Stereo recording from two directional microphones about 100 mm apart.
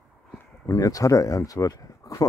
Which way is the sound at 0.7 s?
35° left (ahead or behind).